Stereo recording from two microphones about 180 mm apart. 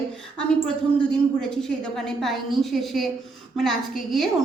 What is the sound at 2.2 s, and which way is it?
A woman's voice, centre (ahead or behind).